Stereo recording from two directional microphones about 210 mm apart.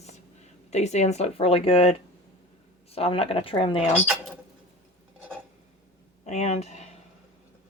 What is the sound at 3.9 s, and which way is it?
Speech, 5° right (ahead or behind).